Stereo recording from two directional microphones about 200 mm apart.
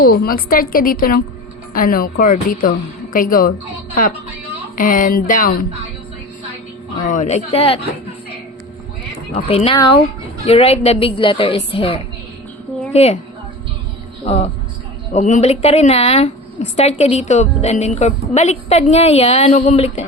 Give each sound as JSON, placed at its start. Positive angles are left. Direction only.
{"t": 0.0, "sound": "a woman's voice", "side_deg": 50}
{"t": 4.8, "sound": "a woman's voice", "side_deg": 40}
{"t": 7.0, "sound": "a woman's voice", "side_deg": 40}
{"t": 9.3, "sound": "a woman's voice", "side_deg": 30}
{"t": 10.4, "sound": "a woman's voice", "side_deg": 30}
{"t": 14.3, "sound": "a woman's voice", "side_deg": 35}